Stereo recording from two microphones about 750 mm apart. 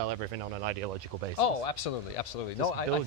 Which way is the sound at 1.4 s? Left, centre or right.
Left.